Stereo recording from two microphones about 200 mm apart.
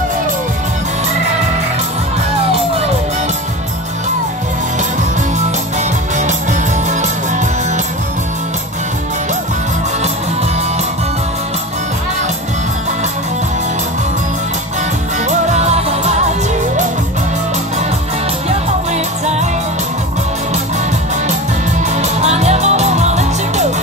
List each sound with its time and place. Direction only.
6.9 s music: 35° right (ahead or behind)
15.2 s music: 35° right (ahead or behind)
21.9 s music: 35° right (ahead or behind)